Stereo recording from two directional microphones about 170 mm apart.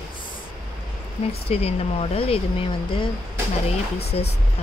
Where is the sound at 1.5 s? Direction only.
35° left (ahead or behind).